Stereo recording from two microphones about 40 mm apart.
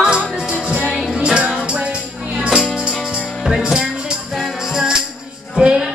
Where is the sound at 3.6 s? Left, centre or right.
Right.